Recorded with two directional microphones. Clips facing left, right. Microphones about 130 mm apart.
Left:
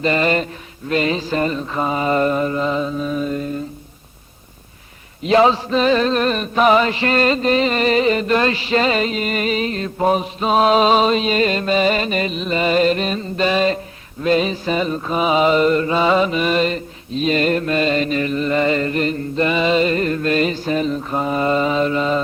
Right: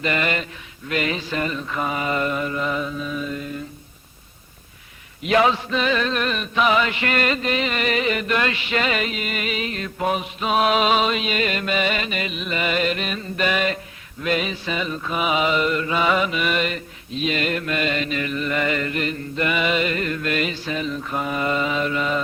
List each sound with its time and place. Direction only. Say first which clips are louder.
0.0 s music: left 6 dB; 35° left (ahead or behind)
5.2 s music: left 5 dB; 30° left (ahead or behind)